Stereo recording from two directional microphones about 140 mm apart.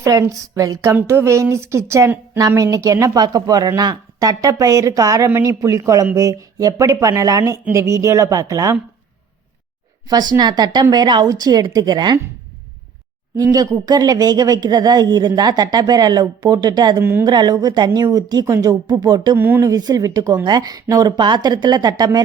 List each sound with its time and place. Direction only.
0.0 s speech: 25° right (ahead or behind)
10.1 s speech: 30° right (ahead or behind)
13.3 s speech: 25° right (ahead or behind)
17.0 s speech: 15° right (ahead or behind)
17.2 s speech: 30° right (ahead or behind)
19.4 s speech: 15° right (ahead or behind)